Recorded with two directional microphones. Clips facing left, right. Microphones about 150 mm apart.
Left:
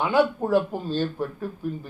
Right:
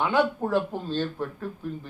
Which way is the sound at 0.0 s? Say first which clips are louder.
Left 2 dB; 5° left (ahead or behind).